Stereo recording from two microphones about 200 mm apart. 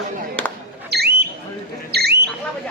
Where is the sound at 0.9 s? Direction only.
55° right (ahead or behind).